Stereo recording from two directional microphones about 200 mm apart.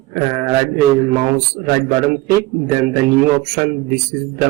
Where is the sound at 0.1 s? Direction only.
40° right (ahead or behind).